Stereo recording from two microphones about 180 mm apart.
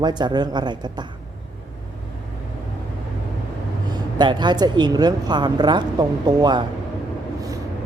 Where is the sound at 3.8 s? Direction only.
25° right (ahead or behind).